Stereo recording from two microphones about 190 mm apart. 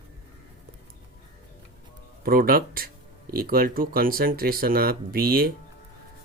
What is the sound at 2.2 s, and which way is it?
Speech, 50° right (ahead or behind).